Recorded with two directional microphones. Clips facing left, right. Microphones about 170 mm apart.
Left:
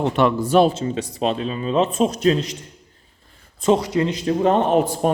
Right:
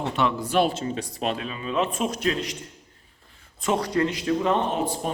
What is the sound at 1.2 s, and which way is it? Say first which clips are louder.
Speech: left 7 dB; 30° left (ahead or behind).